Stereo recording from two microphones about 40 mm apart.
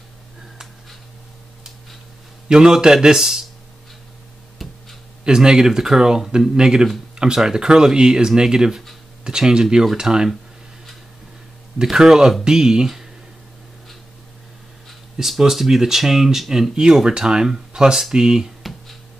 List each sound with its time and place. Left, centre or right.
2.4 s a man's voice: centre
3.2 s speech: centre
4.6 s hum: centre
5.2 s a man's voice: centre
11.8 s speech: centre
15.1 s speech: centre
16.7 s a man's voice: centre
18.6 s music: centre